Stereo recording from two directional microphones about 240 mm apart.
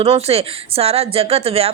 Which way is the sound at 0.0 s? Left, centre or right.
Right.